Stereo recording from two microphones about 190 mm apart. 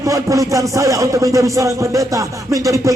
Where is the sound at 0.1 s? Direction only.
15° right (ahead or behind).